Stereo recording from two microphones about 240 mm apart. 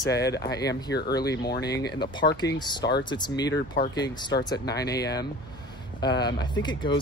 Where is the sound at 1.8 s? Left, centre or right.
Centre.